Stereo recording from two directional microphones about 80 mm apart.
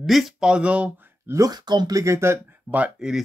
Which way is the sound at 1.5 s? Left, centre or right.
Right.